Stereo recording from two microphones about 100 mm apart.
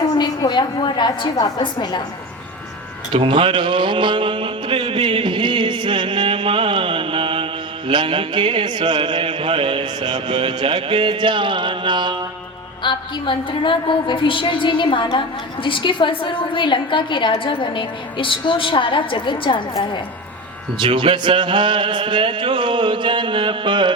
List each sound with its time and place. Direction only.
0.2 s a woman's voice: 50° left (ahead or behind)
3.1 s a man's voice: 60° right (ahead or behind)
12.8 s a woman's voice: 55° left (ahead or behind)
20.7 s music: 55° right (ahead or behind)